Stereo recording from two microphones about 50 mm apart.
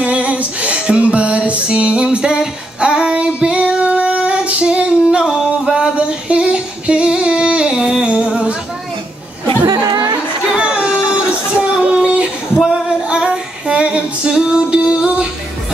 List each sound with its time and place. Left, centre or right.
0.0 s music: right
5.9 s singing: right
10.5 s a sound: right
11.1 s music: right
12.6 s female singing: centre